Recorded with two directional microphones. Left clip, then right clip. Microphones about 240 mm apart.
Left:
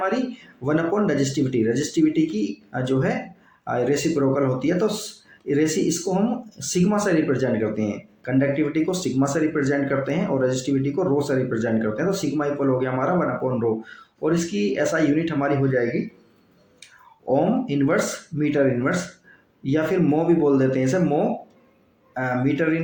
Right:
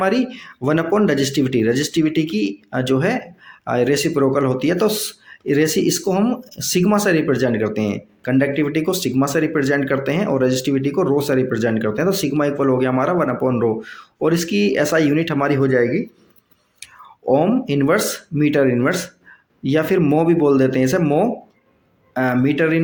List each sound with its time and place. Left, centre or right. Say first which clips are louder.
0.0 s speech: right 5 dB; right